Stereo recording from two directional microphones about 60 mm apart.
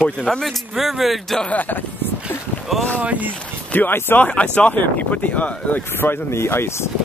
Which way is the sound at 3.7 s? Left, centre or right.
Left.